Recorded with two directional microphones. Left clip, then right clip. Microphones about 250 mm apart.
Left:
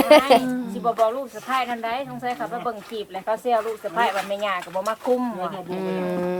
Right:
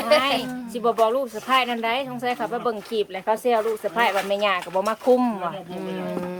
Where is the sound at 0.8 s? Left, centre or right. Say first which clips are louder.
Right 2 dB; right.